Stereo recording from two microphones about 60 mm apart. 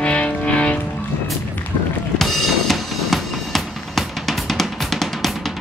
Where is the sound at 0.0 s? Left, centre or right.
Left.